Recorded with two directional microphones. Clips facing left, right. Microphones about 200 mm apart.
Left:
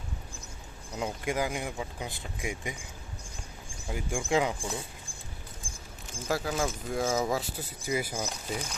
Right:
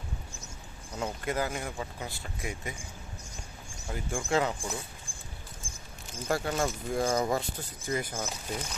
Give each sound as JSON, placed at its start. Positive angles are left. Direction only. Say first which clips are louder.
{"t": 0.9, "sound": "speech", "louder": "left 1 dB", "side_deg": 10}
{"t": 3.8, "sound": "speech", "louder": "left 1 dB", "side_deg": 15}
{"t": 6.1, "sound": "speech", "louder": "right 1 dB", "side_deg": 0}